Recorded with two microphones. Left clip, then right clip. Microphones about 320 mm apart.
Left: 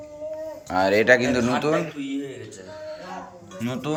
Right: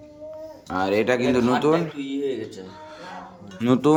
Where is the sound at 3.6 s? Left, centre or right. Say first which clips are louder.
Right 10 dB; centre.